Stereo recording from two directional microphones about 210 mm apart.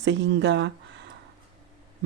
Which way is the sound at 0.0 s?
60° right (ahead or behind).